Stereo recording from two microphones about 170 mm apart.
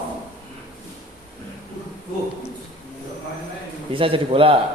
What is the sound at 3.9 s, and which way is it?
Speech, 30° right (ahead or behind).